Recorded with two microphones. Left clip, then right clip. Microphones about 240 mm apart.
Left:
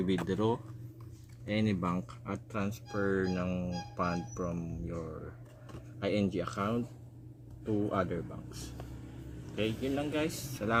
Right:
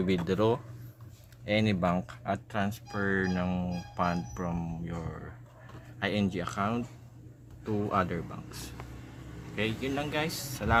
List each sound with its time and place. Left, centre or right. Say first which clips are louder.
0.3 s speech: right 5 dB; right
6.0 s speech: right 1 dB; right
9.6 s speech: right 2 dB; right